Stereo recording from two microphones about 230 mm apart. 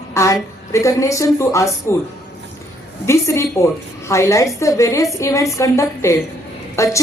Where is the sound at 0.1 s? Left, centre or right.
Centre.